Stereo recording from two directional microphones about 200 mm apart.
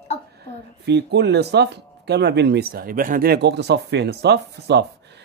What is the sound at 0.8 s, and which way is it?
Speech, 55° right (ahead or behind).